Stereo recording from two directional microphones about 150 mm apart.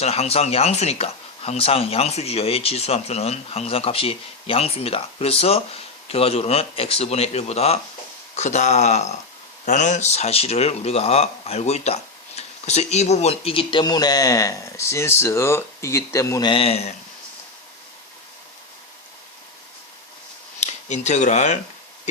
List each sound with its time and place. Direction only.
0.0 s speech: 45° left (ahead or behind); by 16.5 s 20° left (ahead or behind)
16.5 s speech: 40° left (ahead or behind)
20.9 s speech: 50° left (ahead or behind)